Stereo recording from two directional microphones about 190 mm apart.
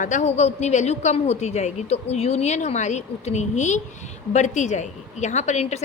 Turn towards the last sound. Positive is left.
turn(degrees=35)  # may be behind; listen again after turning